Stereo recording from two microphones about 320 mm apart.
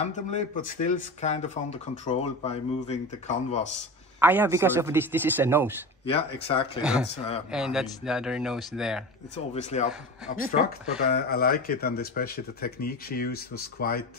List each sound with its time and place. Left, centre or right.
0.0 s speech: left
4.2 s speech: centre
6.0 s speech: centre
6.8 s speech: centre
7.2 s speech: centre
7.5 s speech: centre
9.3 s speech: left
11.1 s speech: left